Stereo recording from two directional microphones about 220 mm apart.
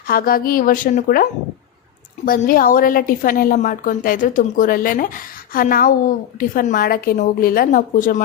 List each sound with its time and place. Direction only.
0.1 s a woman's voice: 40° left (ahead or behind)